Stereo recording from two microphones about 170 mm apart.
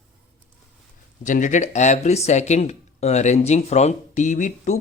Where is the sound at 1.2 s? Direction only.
50° left (ahead or behind).